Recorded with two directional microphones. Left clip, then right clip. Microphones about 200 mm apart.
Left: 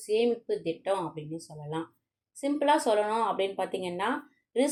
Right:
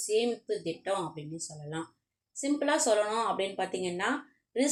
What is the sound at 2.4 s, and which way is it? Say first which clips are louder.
A woman's voice: left 3 dB; 30° left (ahead or behind).